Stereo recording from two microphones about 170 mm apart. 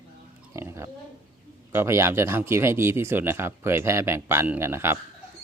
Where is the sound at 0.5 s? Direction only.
15° right (ahead or behind).